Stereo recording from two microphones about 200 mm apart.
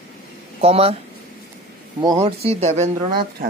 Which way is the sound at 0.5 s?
30° right (ahead or behind).